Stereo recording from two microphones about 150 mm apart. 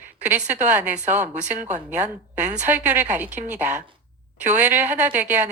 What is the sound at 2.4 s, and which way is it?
Speech, 50° right (ahead or behind).